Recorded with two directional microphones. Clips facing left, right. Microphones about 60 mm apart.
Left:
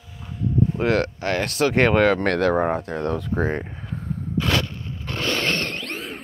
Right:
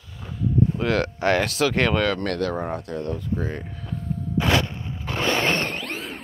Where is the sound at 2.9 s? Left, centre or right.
Left.